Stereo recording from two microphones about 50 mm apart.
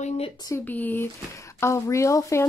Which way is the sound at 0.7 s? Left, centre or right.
Left.